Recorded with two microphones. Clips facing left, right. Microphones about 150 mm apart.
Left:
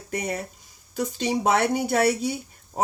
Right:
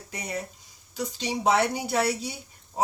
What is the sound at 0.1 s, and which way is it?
Speech, 55° left (ahead or behind).